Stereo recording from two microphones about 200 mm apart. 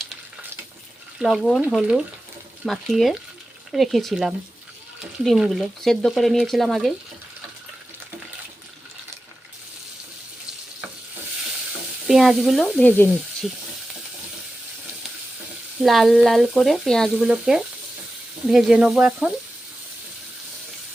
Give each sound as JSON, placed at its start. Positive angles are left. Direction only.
{"t": 1.2, "sound": "frying", "side_deg": 0}
{"t": 12.0, "sound": "frying", "side_deg": 0}
{"t": 15.8, "sound": "frying", "side_deg": 0}